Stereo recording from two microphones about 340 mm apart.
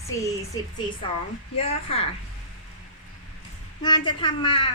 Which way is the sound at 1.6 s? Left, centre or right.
Centre.